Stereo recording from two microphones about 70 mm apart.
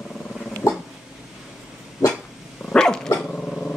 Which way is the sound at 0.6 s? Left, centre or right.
Left.